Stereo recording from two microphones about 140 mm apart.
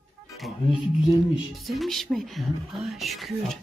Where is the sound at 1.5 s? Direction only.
Centre (ahead or behind).